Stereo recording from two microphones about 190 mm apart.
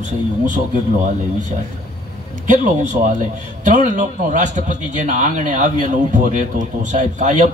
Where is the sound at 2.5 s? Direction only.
45° right (ahead or behind).